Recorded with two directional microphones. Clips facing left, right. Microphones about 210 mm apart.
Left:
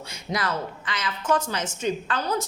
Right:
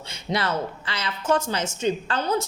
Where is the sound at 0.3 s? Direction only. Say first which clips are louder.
Right 3 dB; 25° right (ahead or behind).